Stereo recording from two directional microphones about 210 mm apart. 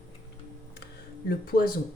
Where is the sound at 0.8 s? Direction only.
45° left (ahead or behind).